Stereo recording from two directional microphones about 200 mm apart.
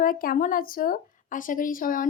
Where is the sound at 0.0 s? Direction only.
45° left (ahead or behind).